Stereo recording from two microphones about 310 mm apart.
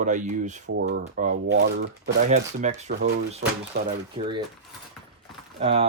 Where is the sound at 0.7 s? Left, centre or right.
Right.